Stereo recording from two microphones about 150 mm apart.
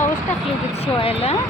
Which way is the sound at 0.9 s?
40° left (ahead or behind).